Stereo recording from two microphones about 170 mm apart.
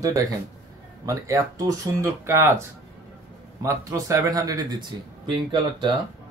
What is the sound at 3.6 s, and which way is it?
Speech, 20° right (ahead or behind).